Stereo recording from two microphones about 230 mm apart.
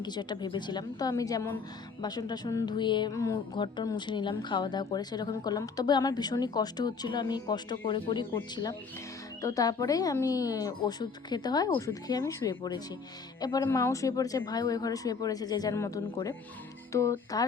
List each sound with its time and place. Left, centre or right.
0.0 s speech: centre